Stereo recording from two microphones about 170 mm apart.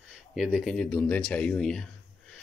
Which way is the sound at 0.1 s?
5° right (ahead or behind).